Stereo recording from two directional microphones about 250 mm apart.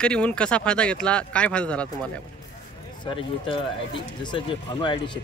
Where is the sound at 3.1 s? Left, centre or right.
Left.